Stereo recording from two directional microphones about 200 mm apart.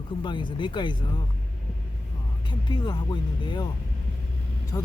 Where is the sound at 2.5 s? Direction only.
20° left (ahead or behind).